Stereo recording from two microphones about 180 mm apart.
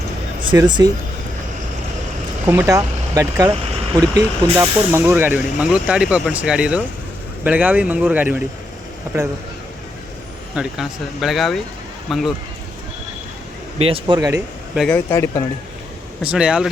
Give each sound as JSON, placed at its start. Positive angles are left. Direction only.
{"t": 0.5, "sound": "speech", "side_deg": -20}
{"t": 2.5, "sound": "speech", "side_deg": -15}
{"t": 3.5, "sound": "vehicle", "side_deg": -25}
{"t": 4.5, "sound": "speech", "side_deg": -15}
{"t": 10.5, "sound": "speech", "side_deg": -5}
{"t": 13.7, "sound": "speech", "side_deg": -30}
{"t": 14.8, "sound": "speech", "side_deg": 10}
{"t": 16.2, "sound": "speech", "side_deg": -5}